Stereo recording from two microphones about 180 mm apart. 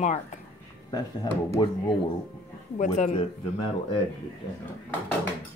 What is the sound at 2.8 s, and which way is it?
Speech, 40° left (ahead or behind).